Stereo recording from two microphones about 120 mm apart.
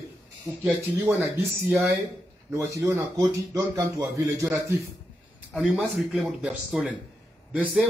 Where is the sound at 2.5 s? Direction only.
25° right (ahead or behind).